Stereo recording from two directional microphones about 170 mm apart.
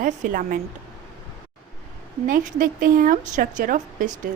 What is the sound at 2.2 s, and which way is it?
A woman's voice, 50° right (ahead or behind).